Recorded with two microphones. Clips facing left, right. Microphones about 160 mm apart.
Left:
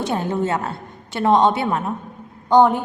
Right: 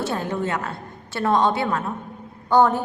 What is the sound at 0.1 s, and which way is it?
A woman's voice, 25° left (ahead or behind).